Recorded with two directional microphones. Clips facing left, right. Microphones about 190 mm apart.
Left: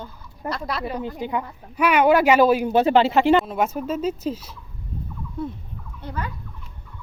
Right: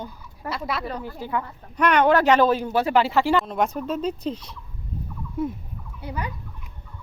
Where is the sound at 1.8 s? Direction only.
10° left (ahead or behind).